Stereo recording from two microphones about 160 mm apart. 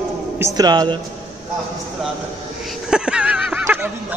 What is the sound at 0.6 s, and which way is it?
Speech, 25° right (ahead or behind).